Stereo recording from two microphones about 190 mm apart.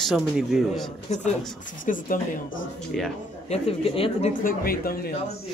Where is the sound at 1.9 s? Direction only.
40° left (ahead or behind).